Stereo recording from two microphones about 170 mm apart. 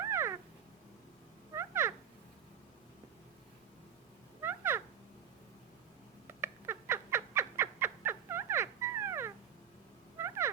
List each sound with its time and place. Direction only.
0.0 s cat: 15° right (ahead or behind)
1.5 s cat: 15° right (ahead or behind)
4.4 s cat: 15° right (ahead or behind)
6.2 s bird: 15° right (ahead or behind)
10.2 s a sound: 15° right (ahead or behind)